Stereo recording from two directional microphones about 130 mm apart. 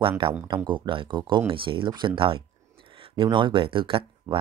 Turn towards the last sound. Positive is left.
turn(degrees=-40)  # may be behind; listen again after turning